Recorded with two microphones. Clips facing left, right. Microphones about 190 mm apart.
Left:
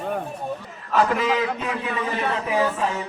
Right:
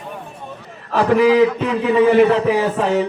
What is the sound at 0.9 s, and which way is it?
A man's voice, 65° right (ahead or behind).